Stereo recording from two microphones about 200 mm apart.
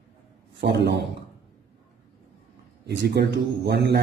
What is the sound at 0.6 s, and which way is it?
Speech, 55° right (ahead or behind).